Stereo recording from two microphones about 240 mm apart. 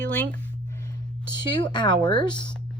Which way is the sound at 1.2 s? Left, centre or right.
Centre.